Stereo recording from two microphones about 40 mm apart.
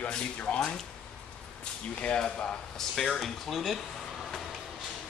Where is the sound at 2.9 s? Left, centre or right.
Centre.